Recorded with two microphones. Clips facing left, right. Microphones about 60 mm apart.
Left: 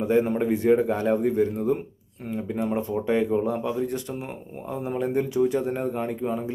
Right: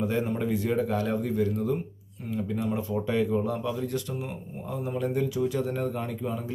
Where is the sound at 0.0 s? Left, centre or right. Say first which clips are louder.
Left 6 dB; left.